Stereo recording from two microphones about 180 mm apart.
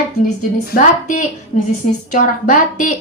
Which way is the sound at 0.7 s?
45° left (ahead or behind).